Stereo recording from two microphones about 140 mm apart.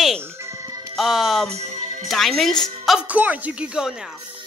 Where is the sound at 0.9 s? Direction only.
Centre (ahead or behind).